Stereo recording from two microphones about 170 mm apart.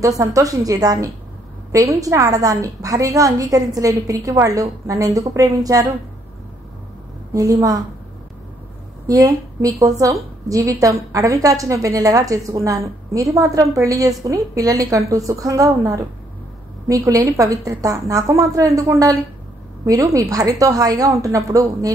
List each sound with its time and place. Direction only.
0.0 s a woman's voice: 20° right (ahead or behind)
7.3 s a woman's voice: 20° right (ahead or behind)
9.0 s a woman's voice: 20° right (ahead or behind)